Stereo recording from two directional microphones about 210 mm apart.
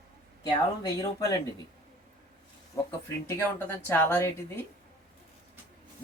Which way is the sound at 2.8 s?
15° left (ahead or behind).